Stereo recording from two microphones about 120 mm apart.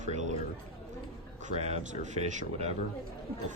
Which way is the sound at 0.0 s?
85° right.